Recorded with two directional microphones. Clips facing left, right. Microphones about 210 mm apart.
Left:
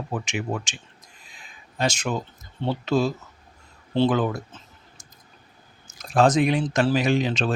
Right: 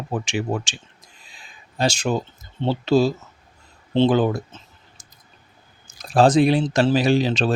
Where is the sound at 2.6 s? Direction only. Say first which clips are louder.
Right 5 dB; 30° right (ahead or behind).